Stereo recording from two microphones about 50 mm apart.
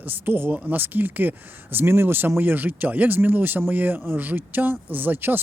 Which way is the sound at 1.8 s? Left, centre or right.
Right.